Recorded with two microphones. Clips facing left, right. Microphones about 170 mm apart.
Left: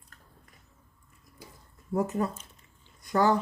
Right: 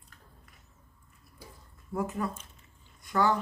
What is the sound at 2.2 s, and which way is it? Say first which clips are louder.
Speech: left 3 dB; 35° left (ahead or behind).